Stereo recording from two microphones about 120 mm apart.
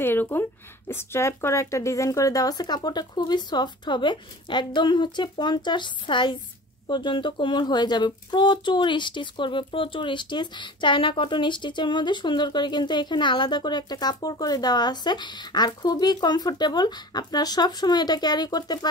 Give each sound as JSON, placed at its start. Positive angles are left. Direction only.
{"t": 0.0, "sound": "speech", "side_deg": 15}